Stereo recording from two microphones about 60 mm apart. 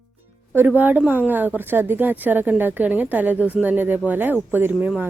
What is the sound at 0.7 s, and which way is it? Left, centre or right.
Speech, right.